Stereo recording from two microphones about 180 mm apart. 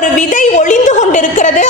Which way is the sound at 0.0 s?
45° left (ahead or behind).